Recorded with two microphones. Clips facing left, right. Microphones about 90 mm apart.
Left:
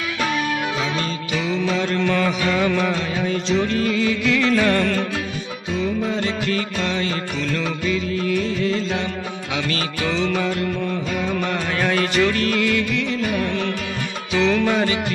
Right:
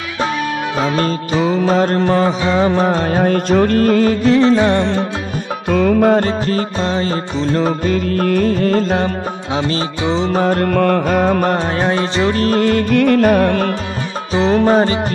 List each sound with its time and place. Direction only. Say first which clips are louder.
0.9 s music: right 8 dB; 40° right (ahead or behind); by 5.0 s 25° right (ahead or behind)
5.7 s music: right 11 dB; 55° right (ahead or behind)
9.6 s music: right 5 dB; 30° right (ahead or behind); by 11.5 s 50° right (ahead or behind)
11.5 s music: right 5 dB; 30° right (ahead or behind); by 13.7 s 50° right (ahead or behind)
14.3 s music: right 6 dB; 35° right (ahead or behind)